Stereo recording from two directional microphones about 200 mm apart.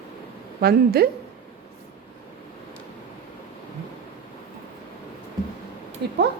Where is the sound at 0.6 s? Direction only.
50° right (ahead or behind).